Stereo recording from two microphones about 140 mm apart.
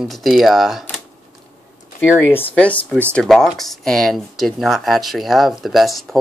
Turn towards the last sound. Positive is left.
turn(degrees=0)  # may be behind; listen again after turning